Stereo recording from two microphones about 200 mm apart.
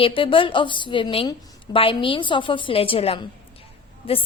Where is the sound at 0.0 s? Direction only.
25° left (ahead or behind).